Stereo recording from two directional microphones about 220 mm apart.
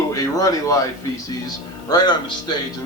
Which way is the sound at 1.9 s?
20° left (ahead or behind).